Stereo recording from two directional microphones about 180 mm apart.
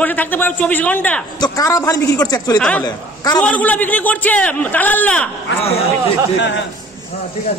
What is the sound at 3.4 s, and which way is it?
A man's voice, 10° left (ahead or behind).